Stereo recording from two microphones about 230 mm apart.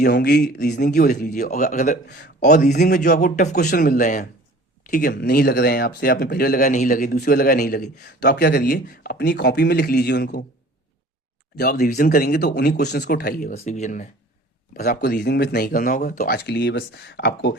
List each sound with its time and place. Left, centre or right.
0.0 s speech: left
0.7 s speech: left
2.0 s speech: left
2.4 s speech: left
11.5 s speech: left